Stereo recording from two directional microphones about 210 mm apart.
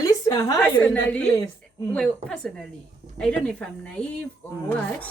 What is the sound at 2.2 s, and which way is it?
A woman's voice, 5° left (ahead or behind).